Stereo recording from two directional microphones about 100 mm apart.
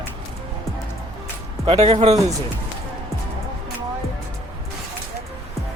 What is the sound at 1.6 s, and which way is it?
Speech, 85° right.